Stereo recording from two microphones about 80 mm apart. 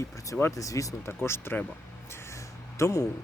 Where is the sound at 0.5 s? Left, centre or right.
Left.